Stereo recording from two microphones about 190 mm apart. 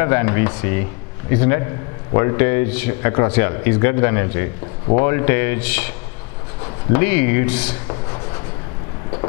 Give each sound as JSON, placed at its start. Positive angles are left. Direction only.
{"t": 0.0, "sound": "speech", "side_deg": 15}